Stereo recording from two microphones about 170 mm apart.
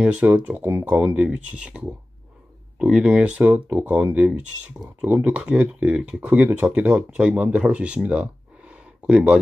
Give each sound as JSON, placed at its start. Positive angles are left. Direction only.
{"t": 0.0, "sound": "speech", "side_deg": -5}